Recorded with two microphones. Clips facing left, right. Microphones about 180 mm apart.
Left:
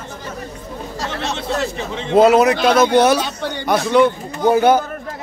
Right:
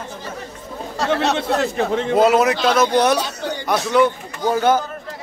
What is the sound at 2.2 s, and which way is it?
A man's voice, centre (ahead or behind).